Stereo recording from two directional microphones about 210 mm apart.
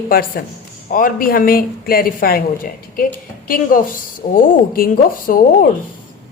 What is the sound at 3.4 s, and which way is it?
A woman's voice, 40° left (ahead or behind).